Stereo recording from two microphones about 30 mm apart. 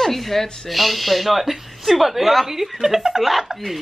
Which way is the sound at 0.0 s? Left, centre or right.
Centre.